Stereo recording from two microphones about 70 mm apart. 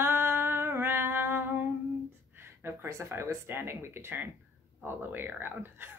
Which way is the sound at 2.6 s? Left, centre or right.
Right.